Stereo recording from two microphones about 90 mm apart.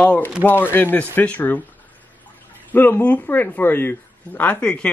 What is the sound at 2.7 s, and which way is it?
Speech, 20° left (ahead or behind).